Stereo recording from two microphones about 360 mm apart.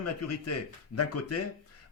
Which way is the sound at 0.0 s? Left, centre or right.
Left.